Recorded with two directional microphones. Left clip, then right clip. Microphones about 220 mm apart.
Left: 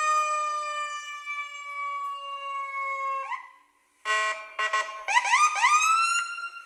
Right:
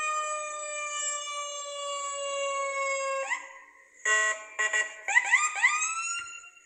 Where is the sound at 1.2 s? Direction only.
10° left (ahead or behind).